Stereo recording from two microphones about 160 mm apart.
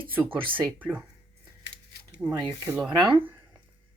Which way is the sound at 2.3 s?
20° right (ahead or behind).